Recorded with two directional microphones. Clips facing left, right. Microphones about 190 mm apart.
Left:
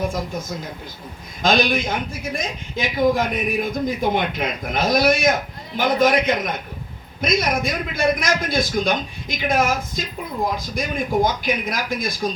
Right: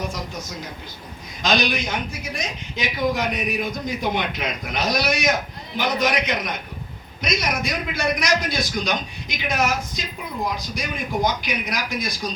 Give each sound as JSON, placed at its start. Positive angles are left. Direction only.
{"t": 1.4, "sound": "speech", "side_deg": 50}